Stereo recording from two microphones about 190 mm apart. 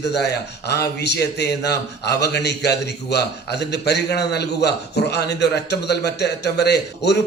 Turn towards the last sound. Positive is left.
turn(degrees=60)  # may be behind; listen again after turning